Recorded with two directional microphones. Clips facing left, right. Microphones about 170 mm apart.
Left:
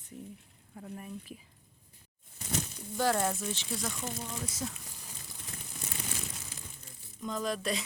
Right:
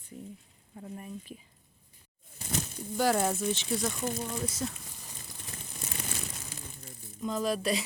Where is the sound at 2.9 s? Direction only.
5° right (ahead or behind).